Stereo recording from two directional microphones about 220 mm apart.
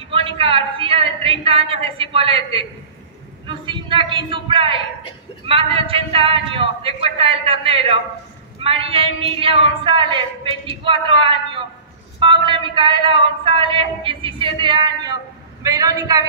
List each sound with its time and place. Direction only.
0.1 s female singing: 25° right (ahead or behind)
15.6 s a woman's voice: 15° right (ahead or behind)